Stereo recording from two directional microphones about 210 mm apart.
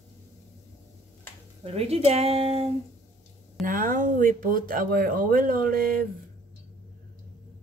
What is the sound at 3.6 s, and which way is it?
Speech, 40° right (ahead or behind).